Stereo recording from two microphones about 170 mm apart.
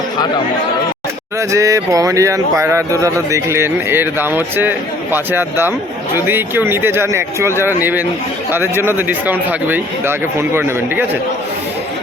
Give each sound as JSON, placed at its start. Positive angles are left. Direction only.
{"t": 1.4, "sound": "speech", "side_deg": -20}